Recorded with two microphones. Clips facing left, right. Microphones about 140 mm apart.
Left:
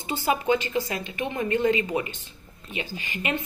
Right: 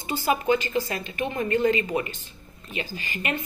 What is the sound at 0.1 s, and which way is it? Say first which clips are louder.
A woman's voice: right 1 dB; 20° left (ahead or behind).